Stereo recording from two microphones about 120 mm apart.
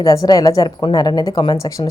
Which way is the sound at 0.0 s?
30° left (ahead or behind).